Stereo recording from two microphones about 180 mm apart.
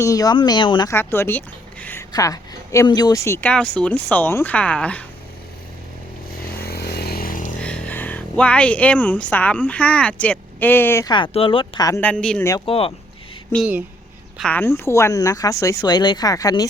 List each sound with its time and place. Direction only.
0.0 s speech: 20° left (ahead or behind)
0.9 s a woman's voice: 10° left (ahead or behind)
6.5 s a sound: 60° left (ahead or behind)
7.6 s speech: 10° left (ahead or behind)
11.1 s speech: 30° left (ahead or behind)
11.9 s a woman's voice: 5° left (ahead or behind)
12.6 s speech: 30° left (ahead or behind)
14.3 s speech: 5° left (ahead or behind)